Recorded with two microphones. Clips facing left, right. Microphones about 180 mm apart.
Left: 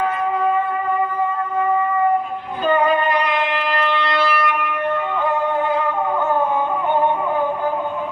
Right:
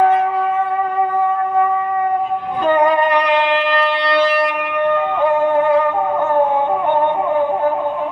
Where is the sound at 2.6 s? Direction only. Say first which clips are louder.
Right 3 dB; 75° right (ahead or behind).